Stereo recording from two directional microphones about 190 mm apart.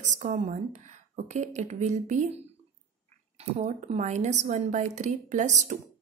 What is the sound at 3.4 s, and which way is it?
A woman's voice, 35° right (ahead or behind).